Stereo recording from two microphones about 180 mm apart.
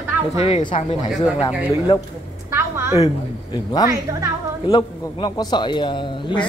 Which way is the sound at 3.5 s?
20° left (ahead or behind).